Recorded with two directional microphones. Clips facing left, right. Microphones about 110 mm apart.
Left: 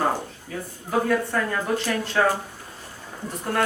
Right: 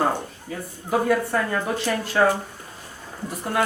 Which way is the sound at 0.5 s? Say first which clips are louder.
Right 1 dB; 5° right (ahead or behind).